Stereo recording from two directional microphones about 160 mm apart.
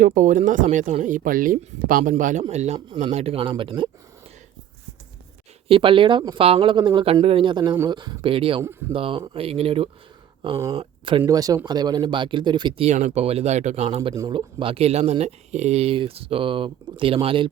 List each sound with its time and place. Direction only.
0.0 s speech: 50° right (ahead or behind); by 3.8 s 30° right (ahead or behind)
5.6 s speech: 35° right (ahead or behind)
11.2 s speech: 20° right (ahead or behind)
12.9 s speech: 45° right (ahead or behind)
14.1 s speech: 25° right (ahead or behind)